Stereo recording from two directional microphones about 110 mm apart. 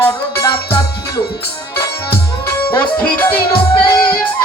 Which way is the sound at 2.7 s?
15° left (ahead or behind).